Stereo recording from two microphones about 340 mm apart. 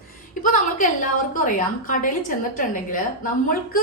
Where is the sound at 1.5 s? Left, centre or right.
Left.